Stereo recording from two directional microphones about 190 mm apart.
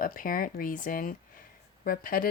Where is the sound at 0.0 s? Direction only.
45° left (ahead or behind).